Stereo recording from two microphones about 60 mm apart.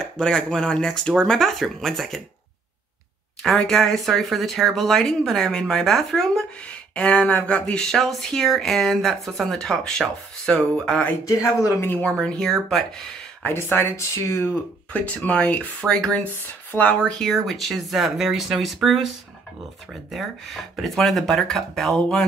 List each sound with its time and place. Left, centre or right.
0.2 s speech: centre
3.4 s speech: centre
6.7 s speech: centre
11.2 s speech: left
12.0 s speech: centre
13.6 s speech: left
14.9 s speech: left
17.2 s speech: centre